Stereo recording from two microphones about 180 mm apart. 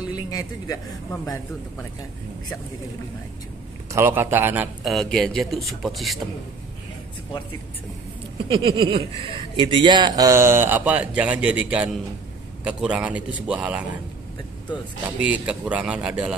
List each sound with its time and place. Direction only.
0.1 s music: 20° left (ahead or behind)
1.2 s speech: 10° left (ahead or behind)
3.9 s a man's voice: 15° right (ahead or behind)
4.8 s a man's voice: centre (ahead or behind)
8.5 s a man's voice: 30° right (ahead or behind); by 16.3 s 5° right (ahead or behind)